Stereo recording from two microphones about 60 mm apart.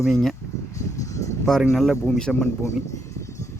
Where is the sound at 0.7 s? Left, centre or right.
Left.